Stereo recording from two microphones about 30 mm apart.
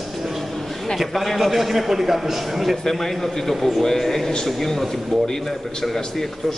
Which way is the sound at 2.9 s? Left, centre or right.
Centre.